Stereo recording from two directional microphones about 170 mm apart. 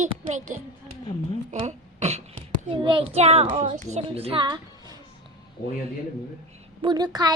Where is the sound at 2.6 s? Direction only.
30° right (ahead or behind).